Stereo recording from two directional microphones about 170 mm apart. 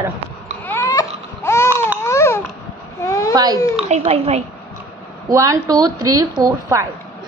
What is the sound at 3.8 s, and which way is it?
Speech, 40° right (ahead or behind).